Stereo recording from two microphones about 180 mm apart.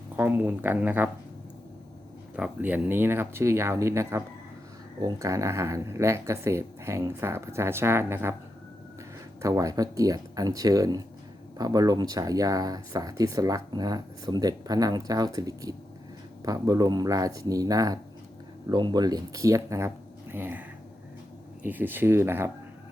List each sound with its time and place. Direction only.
0.2 s speech: 10° right (ahead or behind)
2.3 s speech: 10° right (ahead or behind)
9.4 s speech: 20° right (ahead or behind)